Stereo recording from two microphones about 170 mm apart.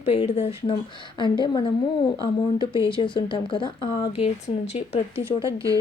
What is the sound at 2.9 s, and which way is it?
A woman's voice, 30° left (ahead or behind).